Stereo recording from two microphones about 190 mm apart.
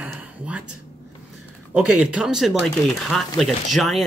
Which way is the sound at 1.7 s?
5° right (ahead or behind).